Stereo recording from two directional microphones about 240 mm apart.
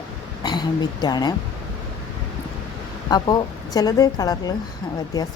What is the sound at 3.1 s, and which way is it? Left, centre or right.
Speech, centre.